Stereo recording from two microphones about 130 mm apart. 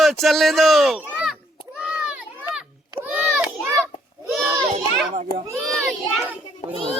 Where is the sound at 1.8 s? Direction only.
10° right (ahead or behind).